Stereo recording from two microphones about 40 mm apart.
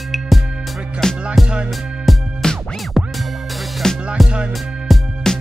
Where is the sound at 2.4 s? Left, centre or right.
Centre.